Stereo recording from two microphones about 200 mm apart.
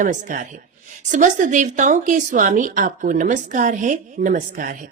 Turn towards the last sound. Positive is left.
turn(degrees=-45)  # may be behind; listen again after turning